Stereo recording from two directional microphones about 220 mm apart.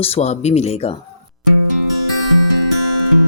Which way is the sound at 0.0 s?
30° left (ahead or behind).